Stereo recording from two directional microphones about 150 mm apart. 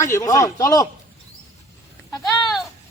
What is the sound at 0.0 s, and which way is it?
Speech, 20° left (ahead or behind).